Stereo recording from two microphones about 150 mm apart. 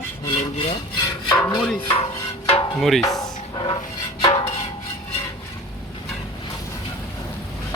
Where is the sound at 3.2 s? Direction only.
30° left (ahead or behind).